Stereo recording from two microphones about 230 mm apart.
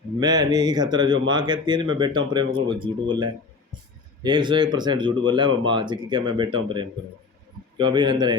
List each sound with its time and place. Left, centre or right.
0.2 s speech: centre